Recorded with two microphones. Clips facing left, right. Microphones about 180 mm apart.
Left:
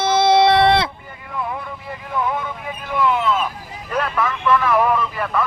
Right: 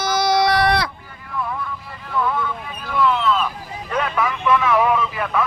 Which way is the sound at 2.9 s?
15° left (ahead or behind).